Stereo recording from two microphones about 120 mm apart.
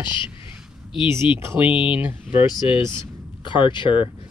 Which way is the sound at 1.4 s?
20° right (ahead or behind).